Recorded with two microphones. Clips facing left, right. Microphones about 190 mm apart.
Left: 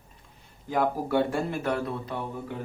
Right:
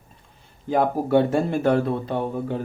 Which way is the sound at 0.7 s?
25° right (ahead or behind).